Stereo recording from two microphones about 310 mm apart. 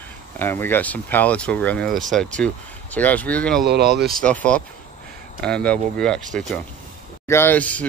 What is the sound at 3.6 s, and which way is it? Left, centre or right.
Speech, right.